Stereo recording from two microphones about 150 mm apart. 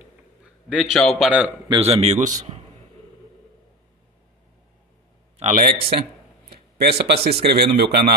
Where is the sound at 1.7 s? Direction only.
40° right (ahead or behind).